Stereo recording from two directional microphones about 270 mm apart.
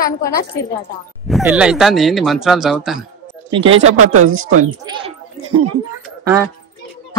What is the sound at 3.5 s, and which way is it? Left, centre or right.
Speech, centre.